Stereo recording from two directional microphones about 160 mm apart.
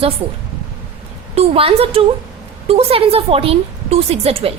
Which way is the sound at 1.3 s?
40° right (ahead or behind).